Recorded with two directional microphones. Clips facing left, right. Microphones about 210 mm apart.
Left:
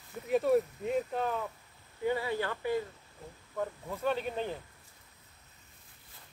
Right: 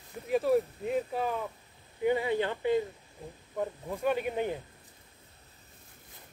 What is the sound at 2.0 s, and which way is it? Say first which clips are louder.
Speech: right 4 dB; 20° right (ahead or behind).